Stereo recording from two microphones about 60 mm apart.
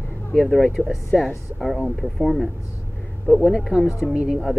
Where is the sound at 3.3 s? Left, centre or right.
Left.